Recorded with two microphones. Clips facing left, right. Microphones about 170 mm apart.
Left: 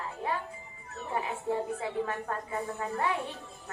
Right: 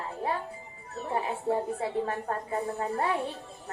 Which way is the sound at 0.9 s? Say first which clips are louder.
Right 3 dB; 35° right (ahead or behind).